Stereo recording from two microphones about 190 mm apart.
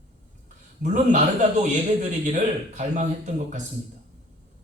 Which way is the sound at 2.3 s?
40° right (ahead or behind).